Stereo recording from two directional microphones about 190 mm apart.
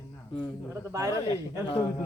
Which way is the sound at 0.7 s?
15° right (ahead or behind).